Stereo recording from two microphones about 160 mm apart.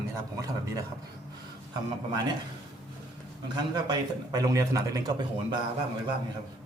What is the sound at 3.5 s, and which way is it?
Speech, 25° right (ahead or behind).